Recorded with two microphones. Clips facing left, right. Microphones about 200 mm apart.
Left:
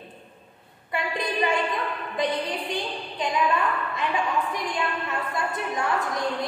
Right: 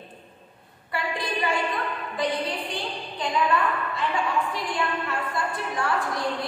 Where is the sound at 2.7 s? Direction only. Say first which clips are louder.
Left 2 dB; 20° left (ahead or behind).